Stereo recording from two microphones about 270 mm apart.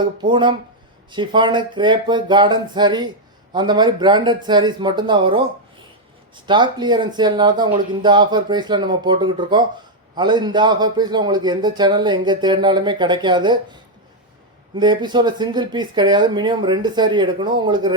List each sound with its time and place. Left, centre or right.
0.0 s a man's voice: centre
14.8 s a man's voice: centre